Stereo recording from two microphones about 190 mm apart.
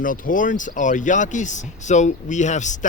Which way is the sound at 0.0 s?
45° left (ahead or behind).